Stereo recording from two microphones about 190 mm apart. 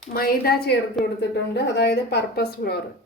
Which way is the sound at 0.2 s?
50° left (ahead or behind).